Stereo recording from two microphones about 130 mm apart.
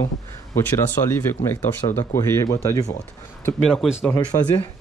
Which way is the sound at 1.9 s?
20° left (ahead or behind).